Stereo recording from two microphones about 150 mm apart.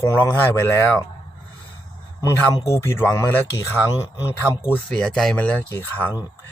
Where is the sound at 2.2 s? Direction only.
20° left (ahead or behind).